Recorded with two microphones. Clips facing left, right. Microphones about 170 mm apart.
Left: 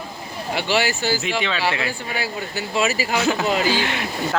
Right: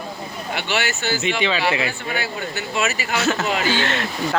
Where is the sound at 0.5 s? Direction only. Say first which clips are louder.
Left 3 dB; 30° left (ahead or behind).